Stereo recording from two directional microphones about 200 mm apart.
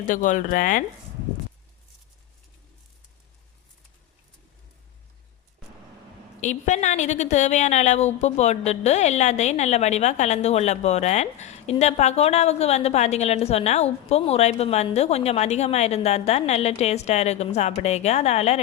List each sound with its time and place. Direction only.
0.1 s a woman's voice: 40° left (ahead or behind)
6.4 s a woman's voice: 35° left (ahead or behind)